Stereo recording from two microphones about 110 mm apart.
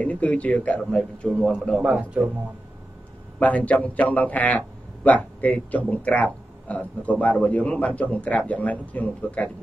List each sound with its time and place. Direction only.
0.0 s a man's voice: 15° left (ahead or behind)
1.8 s a man's voice: 10° right (ahead or behind)
3.3 s a man's voice: 15° left (ahead or behind)